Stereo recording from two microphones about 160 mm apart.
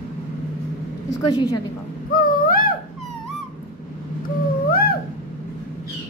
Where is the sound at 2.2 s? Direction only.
60° left (ahead or behind).